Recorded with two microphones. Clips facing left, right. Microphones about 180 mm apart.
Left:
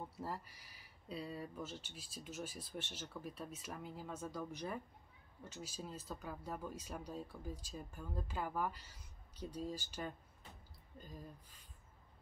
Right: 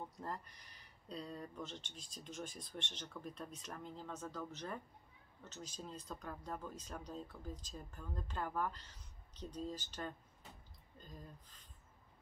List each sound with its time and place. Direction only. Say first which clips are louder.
0.1 s speech: left 1 dB; 5° left (ahead or behind)